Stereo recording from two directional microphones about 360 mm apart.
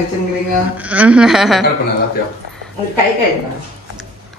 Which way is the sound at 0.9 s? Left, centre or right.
Centre.